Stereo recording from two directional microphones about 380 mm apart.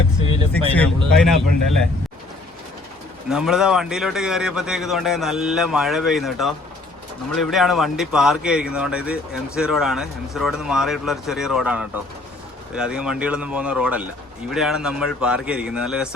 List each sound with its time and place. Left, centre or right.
0.2 s vehicle: centre
1.1 s speech: centre
3.2 s speech: centre